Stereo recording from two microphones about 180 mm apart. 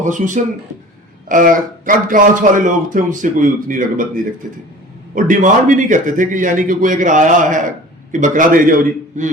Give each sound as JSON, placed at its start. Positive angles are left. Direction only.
{"t": 0.0, "sound": "speech", "side_deg": -45}